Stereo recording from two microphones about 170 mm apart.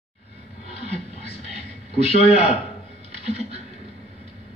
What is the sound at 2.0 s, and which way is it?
Speech, 35° left (ahead or behind).